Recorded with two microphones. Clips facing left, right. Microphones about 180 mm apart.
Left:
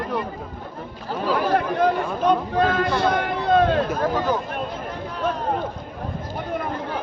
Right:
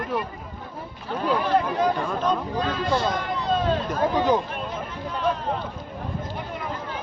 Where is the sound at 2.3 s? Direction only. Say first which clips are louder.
Left 8 dB; 60° left (ahead or behind).